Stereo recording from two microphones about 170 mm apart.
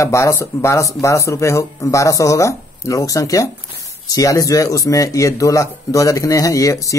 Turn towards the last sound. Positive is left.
turn(degrees=20)  # may be behind; listen again after turning